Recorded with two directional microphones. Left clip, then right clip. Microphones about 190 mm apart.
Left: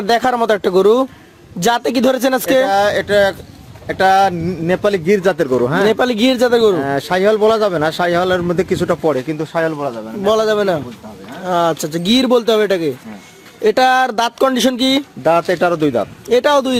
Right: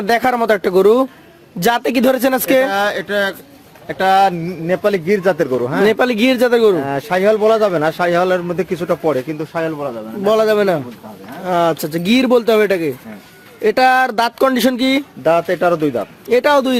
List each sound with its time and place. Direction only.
0.1 s speech: centre (ahead or behind)
2.6 s speech: 30° left (ahead or behind); by 5.9 s 45° left (ahead or behind)
5.9 s speech: 5° right (ahead or behind)
6.8 s speech: 45° left (ahead or behind)
10.2 s speech: 5° right (ahead or behind)
15.2 s a man's voice: 55° left (ahead or behind)
16.3 s speech: 5° right (ahead or behind)